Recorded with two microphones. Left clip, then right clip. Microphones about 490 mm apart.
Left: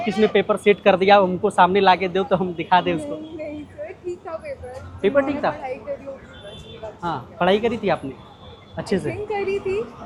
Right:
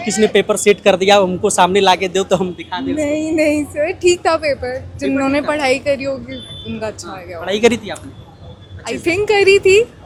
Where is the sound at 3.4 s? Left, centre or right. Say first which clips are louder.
Right 16 dB; right.